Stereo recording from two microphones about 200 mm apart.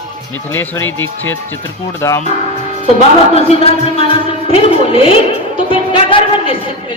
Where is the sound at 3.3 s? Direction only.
30° left (ahead or behind).